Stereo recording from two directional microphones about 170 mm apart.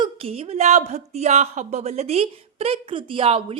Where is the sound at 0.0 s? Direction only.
35° right (ahead or behind).